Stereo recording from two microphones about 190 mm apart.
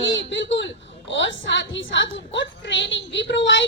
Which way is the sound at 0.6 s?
70° left (ahead or behind).